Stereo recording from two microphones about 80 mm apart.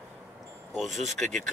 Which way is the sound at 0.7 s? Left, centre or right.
Centre.